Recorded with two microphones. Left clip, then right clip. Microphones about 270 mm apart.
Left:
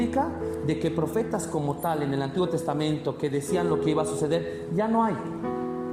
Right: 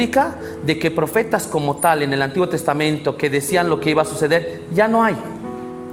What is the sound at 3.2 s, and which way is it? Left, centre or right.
Speech, right.